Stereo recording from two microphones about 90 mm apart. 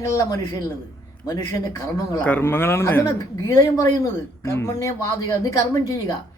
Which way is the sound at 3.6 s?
35° left (ahead or behind).